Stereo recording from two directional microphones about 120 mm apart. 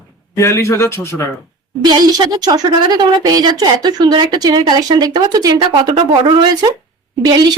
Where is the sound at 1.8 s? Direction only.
35° right (ahead or behind).